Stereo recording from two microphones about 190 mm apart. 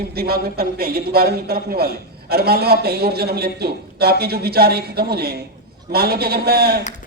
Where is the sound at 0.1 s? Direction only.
55° right (ahead or behind).